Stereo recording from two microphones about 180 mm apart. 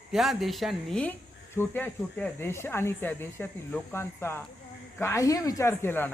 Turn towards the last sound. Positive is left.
turn(degrees=10)  # may be behind; listen again after turning